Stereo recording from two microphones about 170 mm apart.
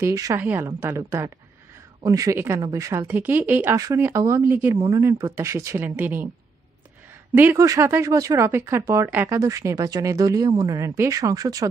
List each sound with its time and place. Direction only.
0.0 s speech: 20° right (ahead or behind)
7.3 s speech: 15° right (ahead or behind)